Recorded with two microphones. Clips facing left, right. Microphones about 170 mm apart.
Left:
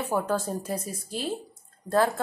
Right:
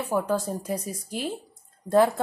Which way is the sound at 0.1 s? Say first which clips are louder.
Right 2 dB; 10° right (ahead or behind).